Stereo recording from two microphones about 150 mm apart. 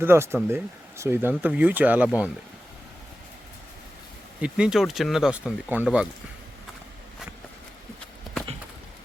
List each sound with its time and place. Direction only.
0.0 s speech: 15° right (ahead or behind)
4.4 s speech: 5° right (ahead or behind)